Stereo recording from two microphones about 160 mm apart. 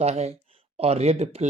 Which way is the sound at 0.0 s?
40° right (ahead or behind).